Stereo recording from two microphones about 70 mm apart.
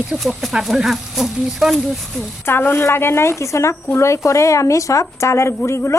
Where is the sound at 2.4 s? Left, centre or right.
Left.